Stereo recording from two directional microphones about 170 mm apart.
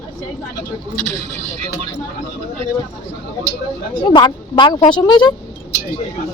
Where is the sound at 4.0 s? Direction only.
25° left (ahead or behind).